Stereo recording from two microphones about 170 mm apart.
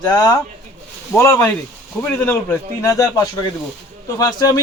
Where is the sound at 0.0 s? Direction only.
25° left (ahead or behind).